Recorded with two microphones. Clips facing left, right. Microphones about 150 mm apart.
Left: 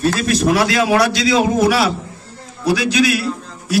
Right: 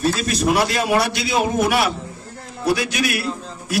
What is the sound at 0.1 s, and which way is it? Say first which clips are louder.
A man's voice: left 3 dB; 80° left.